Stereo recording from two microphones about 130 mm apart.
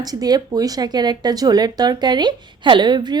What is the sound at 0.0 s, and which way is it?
A woman's voice, 30° right (ahead or behind).